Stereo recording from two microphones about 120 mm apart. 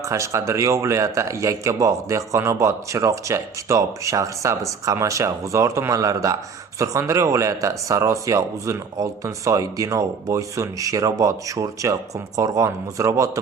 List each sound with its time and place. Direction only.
0.0 s speech: 25° right (ahead or behind)